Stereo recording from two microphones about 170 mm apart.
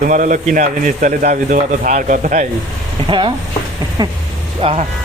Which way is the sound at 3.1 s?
30° right (ahead or behind).